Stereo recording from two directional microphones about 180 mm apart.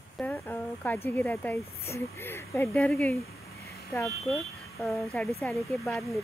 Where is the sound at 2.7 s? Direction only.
Centre (ahead or behind).